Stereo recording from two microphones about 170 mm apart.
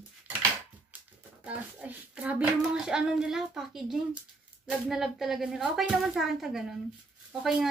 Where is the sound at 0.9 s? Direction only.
10° right (ahead or behind).